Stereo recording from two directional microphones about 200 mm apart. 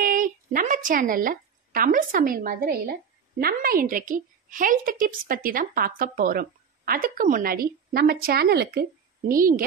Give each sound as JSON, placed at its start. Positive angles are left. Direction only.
{"t": 0.0, "sound": "a woman's voice", "side_deg": -45}